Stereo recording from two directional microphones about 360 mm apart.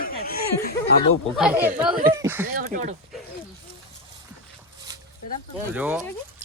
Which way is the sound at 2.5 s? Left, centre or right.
Right.